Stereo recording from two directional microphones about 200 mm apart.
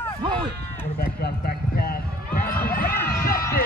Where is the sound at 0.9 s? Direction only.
50° left (ahead or behind).